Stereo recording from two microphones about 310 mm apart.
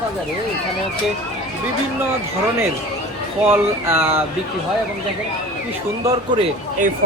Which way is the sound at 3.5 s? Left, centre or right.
Centre.